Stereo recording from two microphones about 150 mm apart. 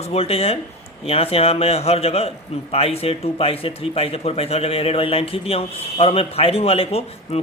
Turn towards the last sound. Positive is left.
turn(degrees=45)  # may be behind; listen again after turning